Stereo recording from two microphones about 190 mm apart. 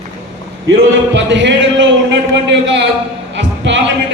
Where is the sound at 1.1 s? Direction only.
70° right (ahead or behind).